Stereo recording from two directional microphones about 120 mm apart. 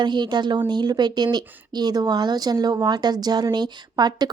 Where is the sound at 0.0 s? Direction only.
40° right (ahead or behind).